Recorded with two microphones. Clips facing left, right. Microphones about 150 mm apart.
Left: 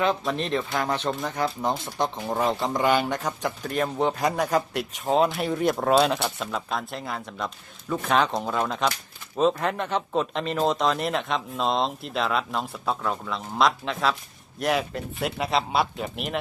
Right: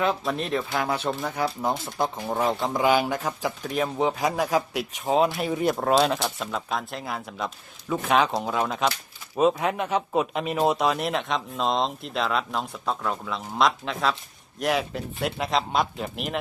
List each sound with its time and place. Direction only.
0.0 s speech: centre (ahead or behind)